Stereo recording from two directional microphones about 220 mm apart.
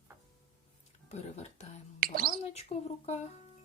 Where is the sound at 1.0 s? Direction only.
30° left (ahead or behind).